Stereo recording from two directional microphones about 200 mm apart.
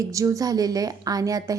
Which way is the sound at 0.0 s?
15° right (ahead or behind).